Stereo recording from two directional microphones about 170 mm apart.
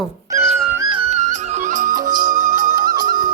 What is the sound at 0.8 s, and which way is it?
Music, 35° right (ahead or behind).